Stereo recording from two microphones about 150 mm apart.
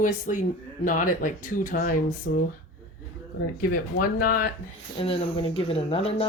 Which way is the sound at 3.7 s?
70° left (ahead or behind).